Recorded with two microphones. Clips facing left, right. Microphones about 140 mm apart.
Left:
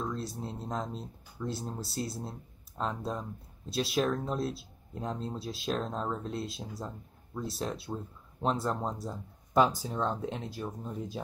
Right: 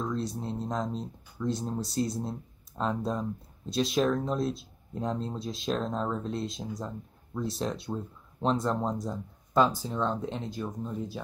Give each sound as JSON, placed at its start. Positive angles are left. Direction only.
{"t": 0.0, "sound": "speech", "side_deg": 5}